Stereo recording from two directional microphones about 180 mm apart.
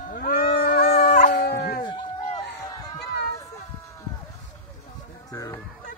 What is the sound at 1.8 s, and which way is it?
Run, 25° left (ahead or behind).